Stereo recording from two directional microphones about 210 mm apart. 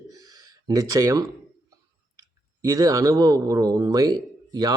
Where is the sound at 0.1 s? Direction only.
15° right (ahead or behind).